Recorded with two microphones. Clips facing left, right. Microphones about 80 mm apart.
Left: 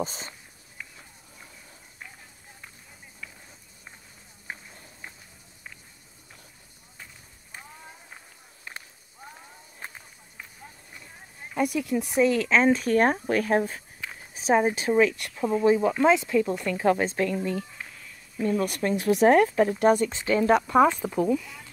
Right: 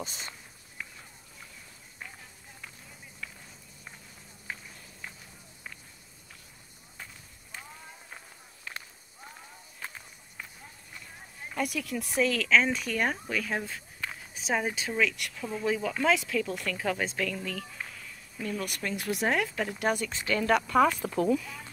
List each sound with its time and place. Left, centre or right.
0.0 s speech: left
8.7 s a sound: left
11.5 s speech: left
14.3 s speech: left
21.0 s speech: centre